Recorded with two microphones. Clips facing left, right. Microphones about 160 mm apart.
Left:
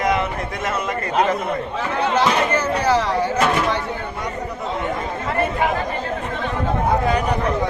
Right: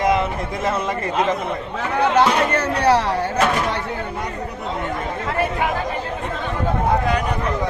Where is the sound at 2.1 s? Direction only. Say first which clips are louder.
Even; 65° right (ahead or behind).